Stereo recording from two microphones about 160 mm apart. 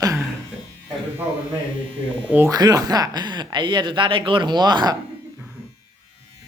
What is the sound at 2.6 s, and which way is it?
Speech, 25° right (ahead or behind).